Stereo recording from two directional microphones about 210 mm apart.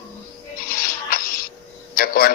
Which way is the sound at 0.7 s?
45° left (ahead or behind).